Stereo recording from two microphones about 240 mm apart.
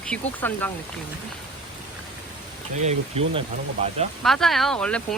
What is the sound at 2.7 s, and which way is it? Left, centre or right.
Speech, right.